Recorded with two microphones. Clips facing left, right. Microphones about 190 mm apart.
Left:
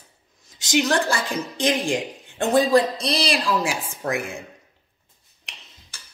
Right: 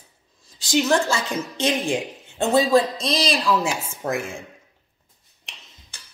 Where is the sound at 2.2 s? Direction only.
15° left (ahead or behind).